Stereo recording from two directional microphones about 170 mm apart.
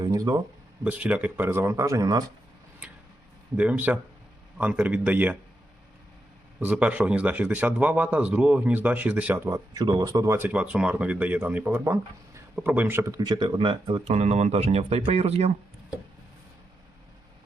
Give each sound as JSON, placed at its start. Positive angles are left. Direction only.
{"t": 0.0, "sound": "speech", "side_deg": -25}
{"t": 0.9, "sound": "speech", "side_deg": -10}
{"t": 3.6, "sound": "speech", "side_deg": -10}
{"t": 6.6, "sound": "speech", "side_deg": -10}